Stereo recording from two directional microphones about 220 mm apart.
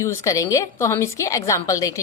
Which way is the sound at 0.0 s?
15° left (ahead or behind).